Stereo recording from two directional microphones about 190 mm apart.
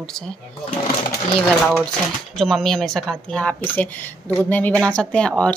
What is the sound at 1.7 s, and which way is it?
Speech, centre (ahead or behind).